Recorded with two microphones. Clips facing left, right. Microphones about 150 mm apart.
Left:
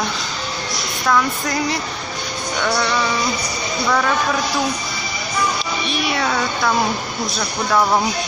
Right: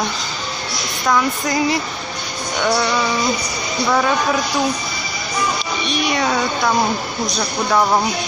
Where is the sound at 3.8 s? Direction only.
10° right (ahead or behind).